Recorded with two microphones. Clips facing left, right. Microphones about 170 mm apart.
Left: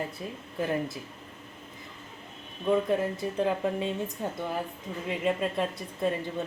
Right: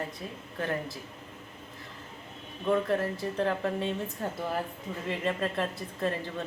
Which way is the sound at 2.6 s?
5° left (ahead or behind).